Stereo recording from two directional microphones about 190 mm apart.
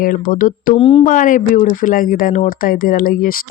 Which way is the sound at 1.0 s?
45° left (ahead or behind).